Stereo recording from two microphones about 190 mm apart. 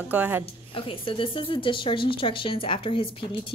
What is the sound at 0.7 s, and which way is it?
A woman's voice, 25° left (ahead or behind).